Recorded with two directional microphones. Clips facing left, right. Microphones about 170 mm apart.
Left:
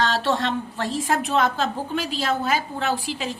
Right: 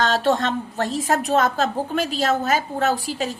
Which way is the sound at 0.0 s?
45° right (ahead or behind).